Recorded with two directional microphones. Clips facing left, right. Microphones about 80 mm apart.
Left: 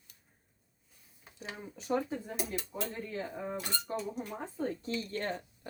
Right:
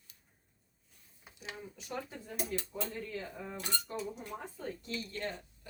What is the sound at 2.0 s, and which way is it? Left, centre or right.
Speech, left.